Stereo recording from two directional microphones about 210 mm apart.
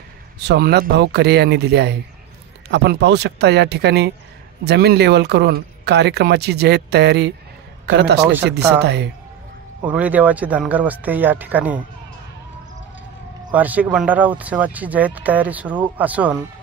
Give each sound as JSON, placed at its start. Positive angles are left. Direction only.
{"t": 0.4, "sound": "speech", "side_deg": -50}
{"t": 9.8, "sound": "speech", "side_deg": -5}
{"t": 13.5, "sound": "speech", "side_deg": -5}